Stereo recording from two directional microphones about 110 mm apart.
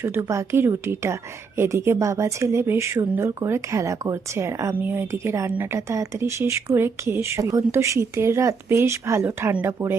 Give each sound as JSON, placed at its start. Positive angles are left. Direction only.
{"t": 0.0, "sound": "speech", "side_deg": -25}